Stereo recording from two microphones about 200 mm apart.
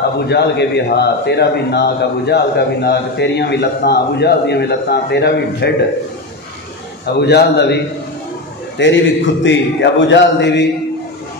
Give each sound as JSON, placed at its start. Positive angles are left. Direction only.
{"t": 0.3, "sound": "a man's voice", "side_deg": 55}
{"t": 7.2, "sound": "a man's voice", "side_deg": 55}